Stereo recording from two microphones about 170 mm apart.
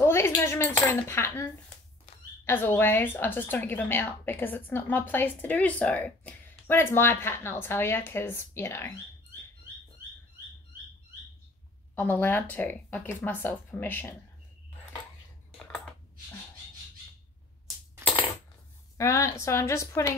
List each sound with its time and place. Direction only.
0.0 s coin: 15° left (ahead or behind)
2.4 s a woman's voice: 15° left (ahead or behind)
11.9 s a woman's voice: 10° left (ahead or behind)
15.6 s a sound: 10° left (ahead or behind)
18.9 s a woman's voice: 15° left (ahead or behind)